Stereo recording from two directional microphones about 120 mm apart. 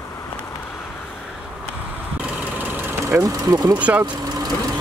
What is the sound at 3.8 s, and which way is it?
Speech, 10° right (ahead or behind).